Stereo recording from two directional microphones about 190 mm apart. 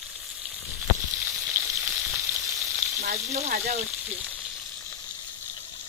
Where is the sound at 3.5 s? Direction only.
45° right (ahead or behind).